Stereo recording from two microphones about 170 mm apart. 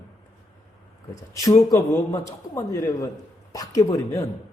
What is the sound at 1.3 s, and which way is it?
A man's voice, 20° left (ahead or behind).